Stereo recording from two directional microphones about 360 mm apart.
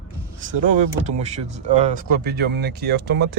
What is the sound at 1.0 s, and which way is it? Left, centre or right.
Speech, centre.